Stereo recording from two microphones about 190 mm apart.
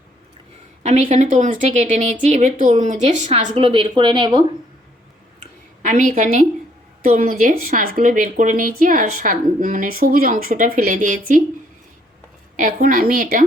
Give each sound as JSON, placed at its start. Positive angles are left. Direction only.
{"t": 0.8, "sound": "a woman's voice", "side_deg": -35}
{"t": 5.4, "sound": "a sound", "side_deg": -40}
{"t": 6.1, "sound": "a woman's voice", "side_deg": -45}
{"t": 12.5, "sound": "a woman's voice", "side_deg": -45}